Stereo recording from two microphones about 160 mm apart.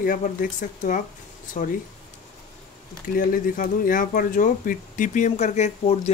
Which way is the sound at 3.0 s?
60° left (ahead or behind).